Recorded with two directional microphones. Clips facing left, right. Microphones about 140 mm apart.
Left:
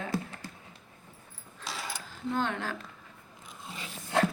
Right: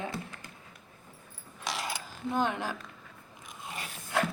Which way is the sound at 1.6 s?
75° right (ahead or behind).